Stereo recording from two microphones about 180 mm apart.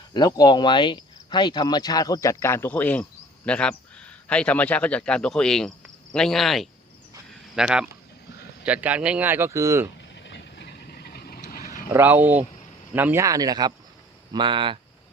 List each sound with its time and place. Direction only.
0.1 s cricket: 20° left (ahead or behind); by 7.9 s 5° right (ahead or behind)
8.6 s speech: 10° right (ahead or behind)
10.2 s vehicle: 75° left (ahead or behind); by 11.7 s 50° left (ahead or behind)
11.9 s a man's voice: 10° right (ahead or behind); by 14.8 s 25° right (ahead or behind)